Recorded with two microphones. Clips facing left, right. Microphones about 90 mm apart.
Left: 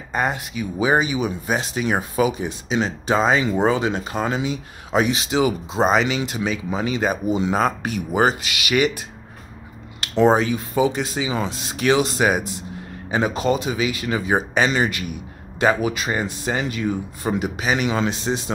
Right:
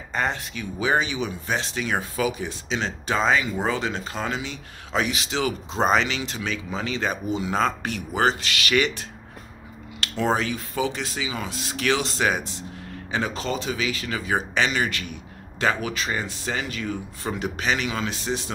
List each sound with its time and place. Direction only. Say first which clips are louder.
0.1 s speech: left 3 dB; 15° left (ahead or behind)
5.7 s speech: left 3 dB; 5° left (ahead or behind)
10.2 s speech: left 7 dB; 20° left (ahead or behind)
17.8 s speech: left 6 dB; 25° left (ahead or behind)